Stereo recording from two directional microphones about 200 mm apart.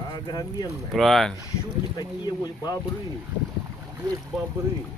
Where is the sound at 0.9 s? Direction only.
Centre (ahead or behind).